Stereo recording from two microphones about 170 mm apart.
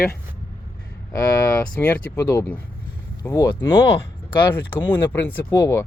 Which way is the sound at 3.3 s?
25° left (ahead or behind).